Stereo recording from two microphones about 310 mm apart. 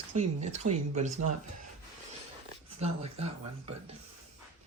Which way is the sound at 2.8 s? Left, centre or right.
Centre.